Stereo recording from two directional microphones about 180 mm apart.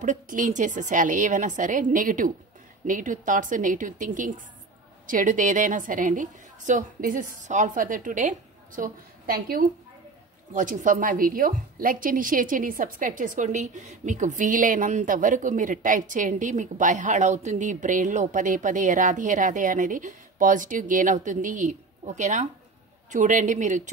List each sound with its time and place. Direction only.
0.0 s a woman's voice: 45° right (ahead or behind)